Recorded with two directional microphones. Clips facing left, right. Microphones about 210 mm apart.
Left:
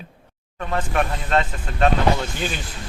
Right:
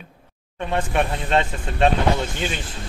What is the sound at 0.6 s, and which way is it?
Speech, 25° right (ahead or behind).